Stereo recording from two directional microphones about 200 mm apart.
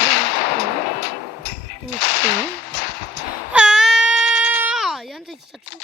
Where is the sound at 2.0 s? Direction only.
60° left (ahead or behind).